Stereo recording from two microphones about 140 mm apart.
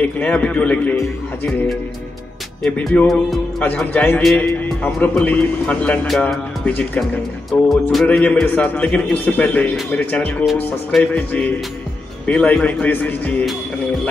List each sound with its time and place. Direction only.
0.0 s a man's voice: 10° left (ahead or behind)
2.6 s a man's voice: 5° left (ahead or behind)